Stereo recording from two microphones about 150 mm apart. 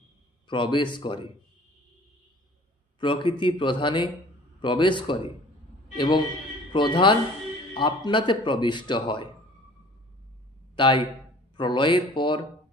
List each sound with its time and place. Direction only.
0.4 s speech: 35° left (ahead or behind)
3.0 s speech: 35° left (ahead or behind)
10.8 s speech: 35° left (ahead or behind)